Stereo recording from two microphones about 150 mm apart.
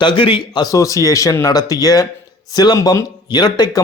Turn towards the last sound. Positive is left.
turn(degrees=25)  # may be behind; listen again after turning